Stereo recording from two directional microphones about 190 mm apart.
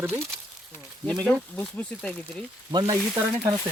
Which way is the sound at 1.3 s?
5° left (ahead or behind).